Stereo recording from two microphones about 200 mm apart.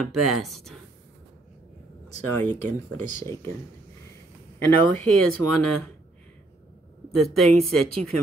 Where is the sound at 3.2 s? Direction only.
15° left (ahead or behind).